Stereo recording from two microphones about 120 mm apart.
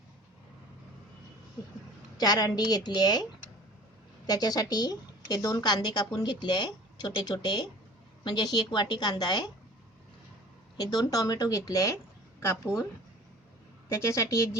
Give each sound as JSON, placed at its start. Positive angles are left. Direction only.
{"t": 2.1, "sound": "a woman's voice", "side_deg": 35}
{"t": 4.3, "sound": "a woman's voice", "side_deg": 35}
{"t": 10.8, "sound": "speech", "side_deg": 30}
{"t": 13.9, "sound": "speech", "side_deg": 25}